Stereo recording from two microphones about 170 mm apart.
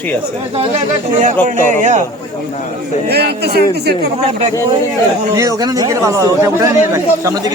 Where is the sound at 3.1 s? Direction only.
75° right (ahead or behind).